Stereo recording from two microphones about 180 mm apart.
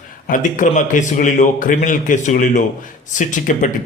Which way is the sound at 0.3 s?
45° left (ahead or behind).